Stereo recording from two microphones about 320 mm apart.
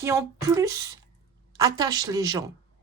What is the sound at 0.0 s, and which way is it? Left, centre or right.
Speech, centre.